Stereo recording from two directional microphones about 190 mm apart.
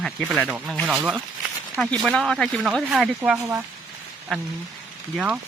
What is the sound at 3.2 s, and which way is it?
Speech, 10° right (ahead or behind).